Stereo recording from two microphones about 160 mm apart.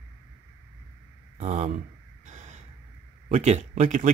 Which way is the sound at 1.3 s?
40° right (ahead or behind).